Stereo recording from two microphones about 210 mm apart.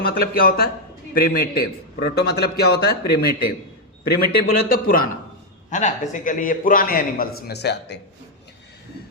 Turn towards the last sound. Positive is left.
turn(degrees=55)  # may be behind; listen again after turning